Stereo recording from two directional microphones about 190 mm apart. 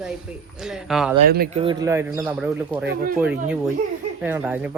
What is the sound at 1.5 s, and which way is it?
Speech, 25° right (ahead or behind).